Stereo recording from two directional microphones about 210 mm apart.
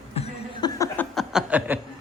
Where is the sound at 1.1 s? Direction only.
5° right (ahead or behind).